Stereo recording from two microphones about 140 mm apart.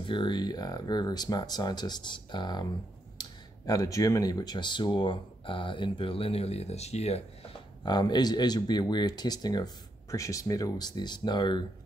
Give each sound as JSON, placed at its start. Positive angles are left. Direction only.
{"t": 0.0, "sound": "speech", "side_deg": 35}
{"t": 7.8, "sound": "speech", "side_deg": 30}